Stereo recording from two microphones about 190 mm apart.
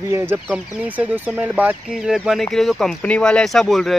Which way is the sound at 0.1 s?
10° right (ahead or behind).